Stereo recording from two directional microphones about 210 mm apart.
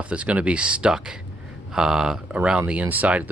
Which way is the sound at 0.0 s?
5° right (ahead or behind).